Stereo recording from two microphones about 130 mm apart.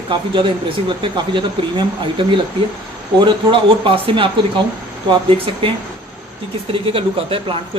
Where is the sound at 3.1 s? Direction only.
40° right (ahead or behind).